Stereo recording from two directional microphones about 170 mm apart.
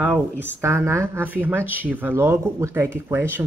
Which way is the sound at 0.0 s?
10° right (ahead or behind).